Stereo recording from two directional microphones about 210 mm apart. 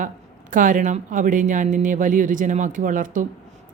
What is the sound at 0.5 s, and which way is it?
A woman's voice, 40° right (ahead or behind).